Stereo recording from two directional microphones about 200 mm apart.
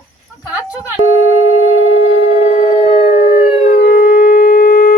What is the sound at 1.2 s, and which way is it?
Busy signal, 90° left.